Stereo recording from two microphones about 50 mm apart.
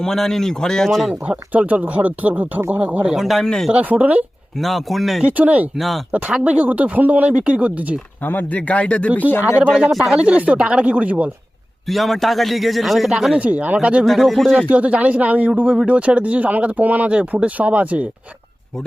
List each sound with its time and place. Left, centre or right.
0.0 s speech: centre
1.5 s speech: right
3.4 s speech: centre
3.8 s speech: right
4.5 s a man's voice: centre
5.2 s speech: right
5.7 s a man's voice: centre
6.4 s speech: right
8.2 s a man's voice: left
10.2 s speech: right
11.9 s a man's voice: centre
13.3 s speech: right
14.0 s a man's voice: centre
14.7 s speech: right